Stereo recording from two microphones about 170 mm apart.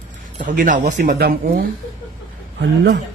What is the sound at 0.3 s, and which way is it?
A man's voice, 50° right (ahead or behind).